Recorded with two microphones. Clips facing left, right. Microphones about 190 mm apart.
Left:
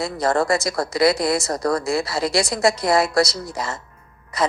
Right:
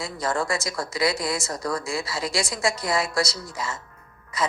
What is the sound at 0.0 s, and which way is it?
A woman's voice, 40° left (ahead or behind).